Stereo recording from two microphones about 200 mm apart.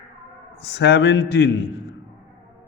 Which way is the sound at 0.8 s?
60° left (ahead or behind).